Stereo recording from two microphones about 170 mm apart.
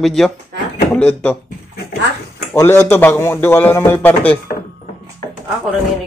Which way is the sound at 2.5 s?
15° left (ahead or behind).